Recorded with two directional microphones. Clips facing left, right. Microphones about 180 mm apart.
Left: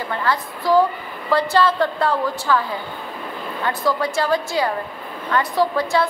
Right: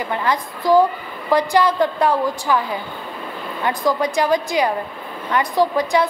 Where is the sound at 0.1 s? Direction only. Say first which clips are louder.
Even; 15° right (ahead or behind).